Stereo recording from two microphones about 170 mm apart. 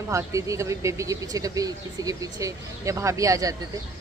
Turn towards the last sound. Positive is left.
turn(degrees=-20)  # may be behind; listen again after turning